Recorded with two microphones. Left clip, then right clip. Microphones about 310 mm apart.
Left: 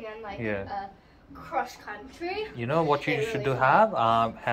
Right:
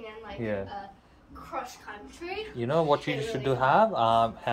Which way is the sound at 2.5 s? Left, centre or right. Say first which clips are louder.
Right 1 dB; centre.